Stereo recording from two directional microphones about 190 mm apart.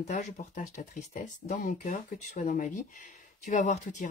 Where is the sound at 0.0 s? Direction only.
40° left (ahead or behind).